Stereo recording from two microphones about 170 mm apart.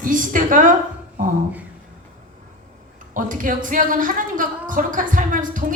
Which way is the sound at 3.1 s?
50° right (ahead or behind).